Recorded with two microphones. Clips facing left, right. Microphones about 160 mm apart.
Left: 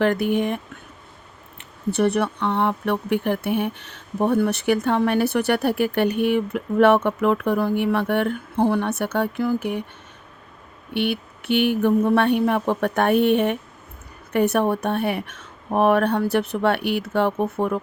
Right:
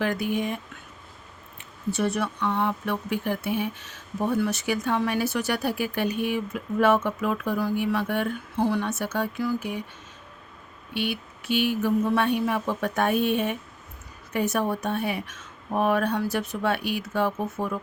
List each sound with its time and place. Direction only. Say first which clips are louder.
0.0 s speech: left 6 dB; 60° left (ahead or behind)
1.9 s speech: left 6 dB; 65° left (ahead or behind)
10.9 s speech: left 6 dB; 60° left (ahead or behind)